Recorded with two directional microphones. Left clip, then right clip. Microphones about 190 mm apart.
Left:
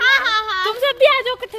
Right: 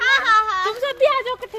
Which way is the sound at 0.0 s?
25° left (ahead or behind).